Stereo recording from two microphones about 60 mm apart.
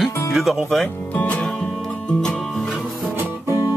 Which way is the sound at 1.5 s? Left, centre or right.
Centre.